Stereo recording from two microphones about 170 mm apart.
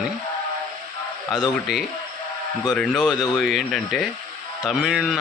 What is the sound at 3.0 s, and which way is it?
Music, centre (ahead or behind).